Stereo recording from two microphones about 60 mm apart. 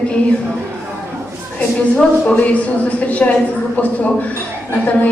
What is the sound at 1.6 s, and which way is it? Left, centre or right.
A woman's voice, centre.